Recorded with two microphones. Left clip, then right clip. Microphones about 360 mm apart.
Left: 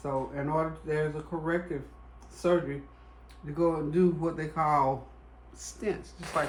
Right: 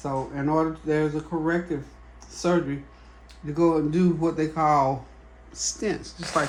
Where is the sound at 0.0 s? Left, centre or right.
Right.